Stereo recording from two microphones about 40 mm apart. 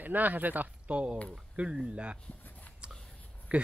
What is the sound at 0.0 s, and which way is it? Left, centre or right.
Speech, right.